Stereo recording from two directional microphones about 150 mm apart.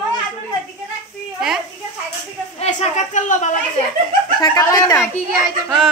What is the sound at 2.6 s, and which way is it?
Speech, 50° left (ahead or behind).